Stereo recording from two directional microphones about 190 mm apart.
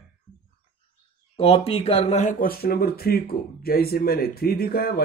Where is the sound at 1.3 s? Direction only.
30° left (ahead or behind).